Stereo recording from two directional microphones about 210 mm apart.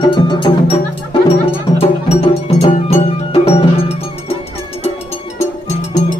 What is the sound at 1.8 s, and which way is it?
Music, 30° left (ahead or behind).